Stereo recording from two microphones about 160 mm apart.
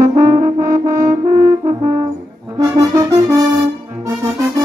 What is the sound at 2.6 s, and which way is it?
Brass instrument, 20° right (ahead or behind).